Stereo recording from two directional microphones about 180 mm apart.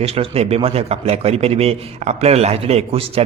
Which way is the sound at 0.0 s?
35° right (ahead or behind).